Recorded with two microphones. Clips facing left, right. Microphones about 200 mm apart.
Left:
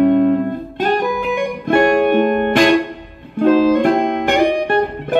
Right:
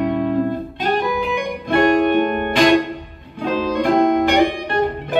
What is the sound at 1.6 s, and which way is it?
Music, 50° left (ahead or behind).